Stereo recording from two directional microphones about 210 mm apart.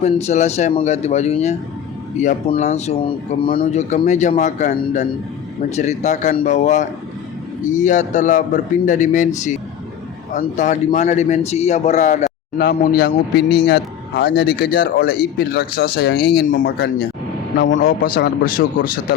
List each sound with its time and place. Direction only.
0.0 s a man's voice: 30° left (ahead or behind); by 17.8 s 60° left (ahead or behind)
17.8 s a man's voice: 45° left (ahead or behind)